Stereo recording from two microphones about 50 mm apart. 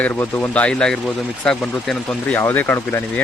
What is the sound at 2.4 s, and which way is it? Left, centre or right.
Speech, left.